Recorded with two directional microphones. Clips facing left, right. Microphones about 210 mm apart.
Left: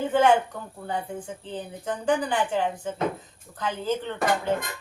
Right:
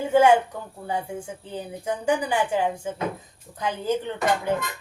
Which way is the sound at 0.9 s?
10° right (ahead or behind).